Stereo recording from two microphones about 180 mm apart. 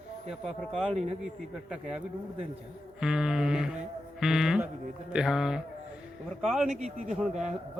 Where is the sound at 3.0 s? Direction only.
5° right (ahead or behind).